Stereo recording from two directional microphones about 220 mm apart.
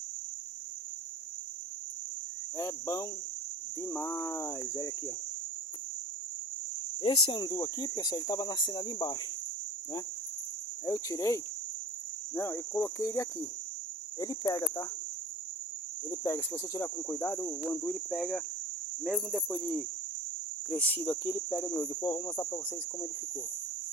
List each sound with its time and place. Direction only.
2.6 s cricket: 15° left (ahead or behind)
7.3 s cricket: 20° left (ahead or behind)
10.8 s cricket: 15° left (ahead or behind)
16.0 s cricket: 15° left (ahead or behind)
19.0 s speech: centre (ahead or behind)
20.7 s cricket: 10° left (ahead or behind)